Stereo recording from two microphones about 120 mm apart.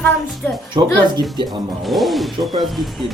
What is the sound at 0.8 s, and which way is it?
Speech, 40° right (ahead or behind).